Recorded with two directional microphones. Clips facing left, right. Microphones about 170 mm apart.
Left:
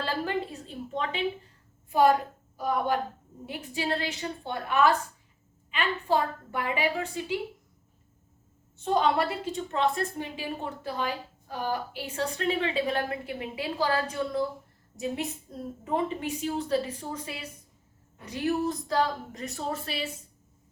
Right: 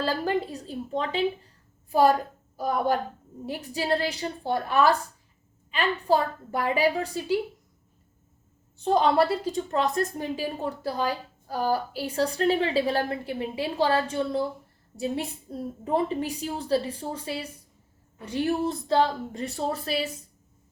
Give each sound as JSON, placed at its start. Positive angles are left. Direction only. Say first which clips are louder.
{"t": 0.0, "sound": "a woman's voice", "louder": "right 4 dB", "side_deg": -35}
{"t": 8.8, "sound": "a woman's voice", "louder": "right 4 dB", "side_deg": -35}